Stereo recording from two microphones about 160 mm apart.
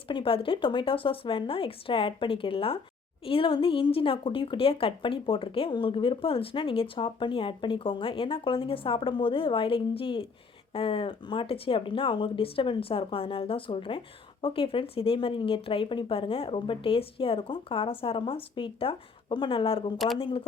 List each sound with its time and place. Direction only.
0.1 s a woman's voice: 35° left (ahead or behind)